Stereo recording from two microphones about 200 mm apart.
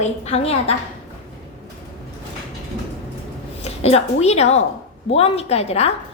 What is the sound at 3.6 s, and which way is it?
A woman's voice, 30° left (ahead or behind).